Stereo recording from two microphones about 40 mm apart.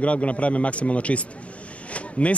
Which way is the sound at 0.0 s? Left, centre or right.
Left.